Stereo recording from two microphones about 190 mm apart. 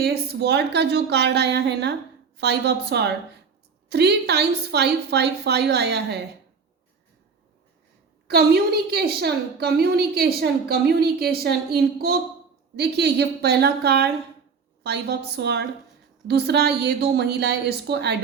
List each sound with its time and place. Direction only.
0.0 s a woman's voice: 55° right (ahead or behind)
8.3 s a woman's voice: 55° right (ahead or behind)